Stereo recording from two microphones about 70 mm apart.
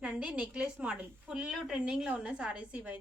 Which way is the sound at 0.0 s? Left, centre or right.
Centre.